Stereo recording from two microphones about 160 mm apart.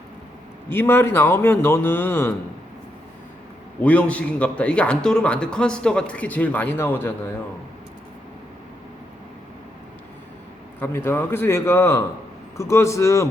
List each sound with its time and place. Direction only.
0.7 s a man's voice: 15° left (ahead or behind)
3.8 s a man's voice: 10° left (ahead or behind)
10.8 s a man's voice: 15° left (ahead or behind)